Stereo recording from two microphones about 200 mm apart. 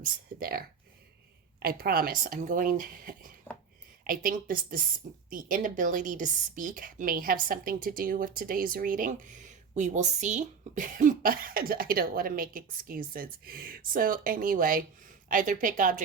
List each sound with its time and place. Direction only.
0.0 s a woman's voice: 50° right (ahead or behind)